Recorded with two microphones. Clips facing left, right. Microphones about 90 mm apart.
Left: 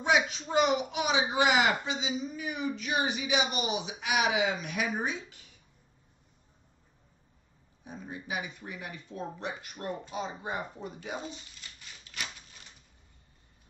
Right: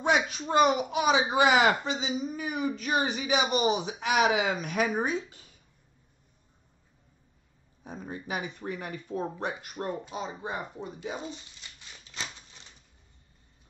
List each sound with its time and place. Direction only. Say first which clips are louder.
0.0 s speech: right 1 dB; 50° right (ahead or behind)
7.8 s speech: right 3 dB; 40° right (ahead or behind)